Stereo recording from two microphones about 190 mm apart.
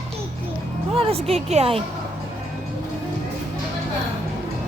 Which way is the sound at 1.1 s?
30° right (ahead or behind).